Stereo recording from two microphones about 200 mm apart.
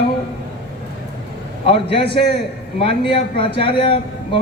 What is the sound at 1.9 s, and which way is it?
A man's voice, 30° left (ahead or behind).